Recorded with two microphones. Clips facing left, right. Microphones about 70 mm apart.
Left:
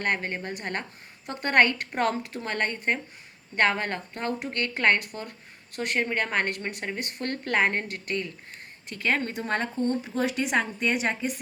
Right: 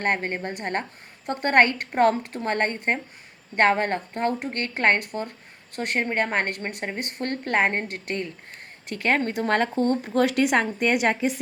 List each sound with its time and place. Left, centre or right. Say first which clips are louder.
0.0 s a woman's voice: right 3 dB; right
8.9 s a woman's voice: right 4 dB; right
9.3 s speech: right 6 dB; right